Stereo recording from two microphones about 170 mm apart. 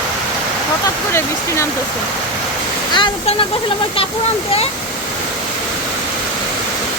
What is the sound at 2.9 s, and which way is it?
Speech, 25° left (ahead or behind).